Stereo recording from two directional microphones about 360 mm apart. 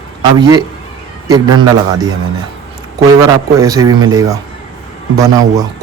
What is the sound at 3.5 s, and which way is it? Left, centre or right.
A man's voice, centre.